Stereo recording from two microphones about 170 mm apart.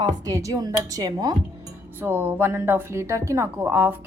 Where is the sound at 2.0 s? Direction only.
10° right (ahead or behind).